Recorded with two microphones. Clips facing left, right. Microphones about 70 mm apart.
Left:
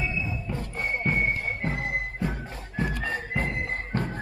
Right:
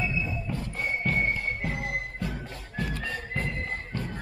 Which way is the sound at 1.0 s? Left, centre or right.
Centre.